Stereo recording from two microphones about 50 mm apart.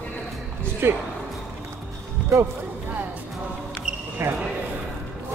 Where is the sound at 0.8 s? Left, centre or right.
Right.